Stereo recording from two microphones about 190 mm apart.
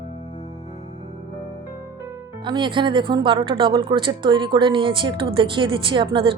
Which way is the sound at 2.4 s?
25° right (ahead or behind).